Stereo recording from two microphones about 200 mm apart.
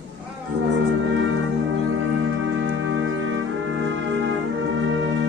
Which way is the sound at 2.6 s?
75° right (ahead or behind).